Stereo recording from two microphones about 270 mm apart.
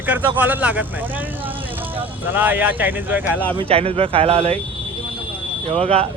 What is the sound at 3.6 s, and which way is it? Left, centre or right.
Speech, right.